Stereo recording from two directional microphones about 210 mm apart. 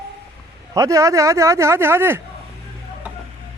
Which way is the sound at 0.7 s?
15° right (ahead or behind).